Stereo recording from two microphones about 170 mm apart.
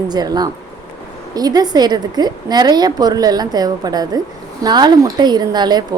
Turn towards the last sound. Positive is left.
turn(degrees=-25)  # may be behind; listen again after turning